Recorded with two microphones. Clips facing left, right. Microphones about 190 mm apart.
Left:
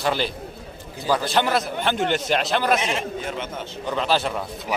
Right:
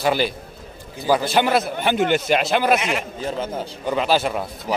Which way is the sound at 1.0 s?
15° right (ahead or behind).